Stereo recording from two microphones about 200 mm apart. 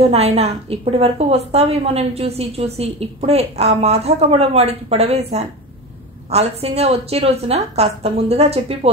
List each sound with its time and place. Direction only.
0.0 s a woman's voice: 30° right (ahead or behind)